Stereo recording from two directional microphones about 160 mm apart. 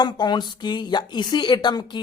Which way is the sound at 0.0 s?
25° left (ahead or behind).